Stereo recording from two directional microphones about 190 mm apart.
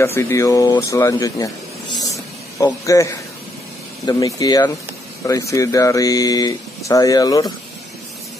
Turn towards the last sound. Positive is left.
turn(degrees=20)  # may be behind; listen again after turning